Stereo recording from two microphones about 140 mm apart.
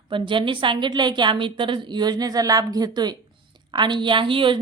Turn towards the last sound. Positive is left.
turn(degrees=-35)  # may be behind; listen again after turning